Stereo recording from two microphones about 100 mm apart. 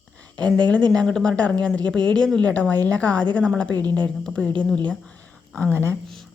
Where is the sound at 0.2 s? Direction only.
10° left (ahead or behind).